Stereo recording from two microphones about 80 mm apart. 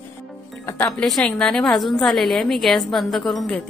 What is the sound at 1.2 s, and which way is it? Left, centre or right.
A woman's voice, centre.